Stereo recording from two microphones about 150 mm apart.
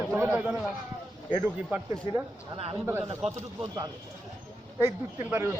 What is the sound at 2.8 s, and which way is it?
Speech, 15° right (ahead or behind).